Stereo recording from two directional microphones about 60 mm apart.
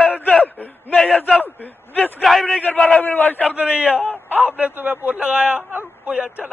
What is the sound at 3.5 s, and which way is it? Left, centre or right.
Speech, centre.